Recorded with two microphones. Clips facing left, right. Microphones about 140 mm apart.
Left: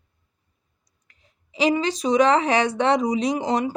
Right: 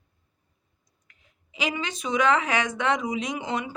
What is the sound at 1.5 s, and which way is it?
Speech, 35° left (ahead or behind).